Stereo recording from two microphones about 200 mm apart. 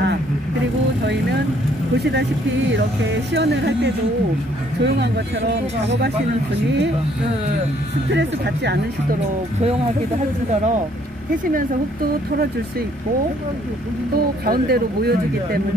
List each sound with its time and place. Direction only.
2.7 s speech: 60° right (ahead or behind)
8.1 s speech: 60° right (ahead or behind)
10.5 s speech: 35° right (ahead or behind)
14.1 s speech: 50° right (ahead or behind)